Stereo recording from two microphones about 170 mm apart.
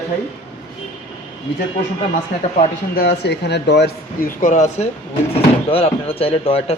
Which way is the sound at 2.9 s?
70° left (ahead or behind).